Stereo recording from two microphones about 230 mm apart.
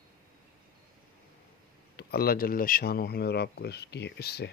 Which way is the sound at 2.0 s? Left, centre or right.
Left.